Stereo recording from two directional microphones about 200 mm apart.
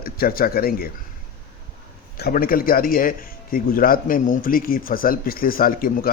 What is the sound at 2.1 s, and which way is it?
A man's voice, 50° left (ahead or behind).